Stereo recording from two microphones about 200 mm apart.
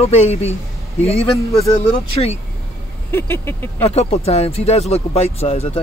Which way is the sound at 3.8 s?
30° left (ahead or behind).